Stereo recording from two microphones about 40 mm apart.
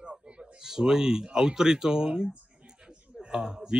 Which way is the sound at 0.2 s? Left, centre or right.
Right.